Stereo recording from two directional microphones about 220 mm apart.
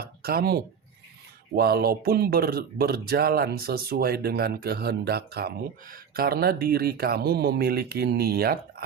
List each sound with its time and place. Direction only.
0.0 s speech: 45° right (ahead or behind)